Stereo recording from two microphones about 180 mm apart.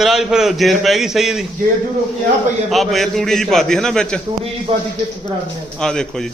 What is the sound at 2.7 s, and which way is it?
A man's voice, centre (ahead or behind).